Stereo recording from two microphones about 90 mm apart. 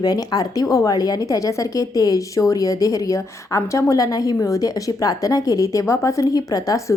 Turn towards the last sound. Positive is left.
turn(degrees=40)  # may be behind; listen again after turning